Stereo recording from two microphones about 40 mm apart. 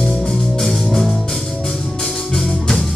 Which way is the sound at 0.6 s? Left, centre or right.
Centre.